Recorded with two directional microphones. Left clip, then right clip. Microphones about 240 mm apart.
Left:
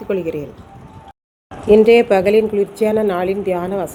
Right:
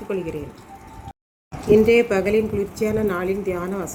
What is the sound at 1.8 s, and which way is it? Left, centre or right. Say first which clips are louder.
A woman's voice: left 6 dB; centre.